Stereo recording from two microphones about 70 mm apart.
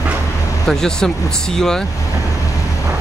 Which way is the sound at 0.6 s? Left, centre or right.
Centre.